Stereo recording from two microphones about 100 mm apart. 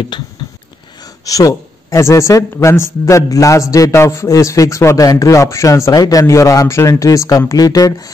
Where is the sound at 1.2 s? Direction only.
35° left (ahead or behind).